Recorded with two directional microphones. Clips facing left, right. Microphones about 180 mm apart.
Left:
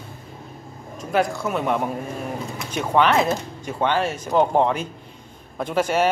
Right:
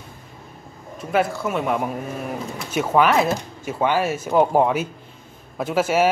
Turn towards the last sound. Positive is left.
turn(degrees=-5)  # may be behind; listen again after turning